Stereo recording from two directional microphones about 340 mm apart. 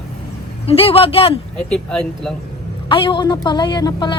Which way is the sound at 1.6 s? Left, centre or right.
Centre.